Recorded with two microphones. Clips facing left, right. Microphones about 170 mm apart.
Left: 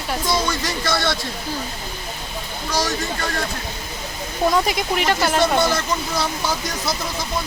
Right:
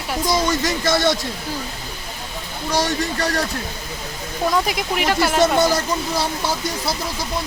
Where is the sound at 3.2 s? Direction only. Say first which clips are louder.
Right 4 dB; 40° right (ahead or behind).